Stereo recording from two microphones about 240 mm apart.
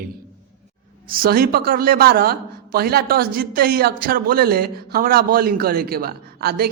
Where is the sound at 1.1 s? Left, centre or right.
Right.